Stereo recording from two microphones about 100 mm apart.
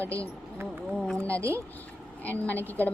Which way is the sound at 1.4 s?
30° right (ahead or behind).